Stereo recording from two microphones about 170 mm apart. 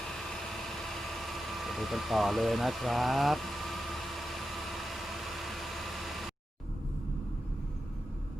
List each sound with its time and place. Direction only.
0.3 s vehicle: centre (ahead or behind)